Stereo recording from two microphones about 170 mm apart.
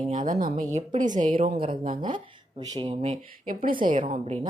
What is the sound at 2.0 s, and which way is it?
Speech, 25° right (ahead or behind).